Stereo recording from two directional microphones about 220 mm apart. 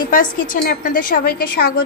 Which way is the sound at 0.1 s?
40° left (ahead or behind).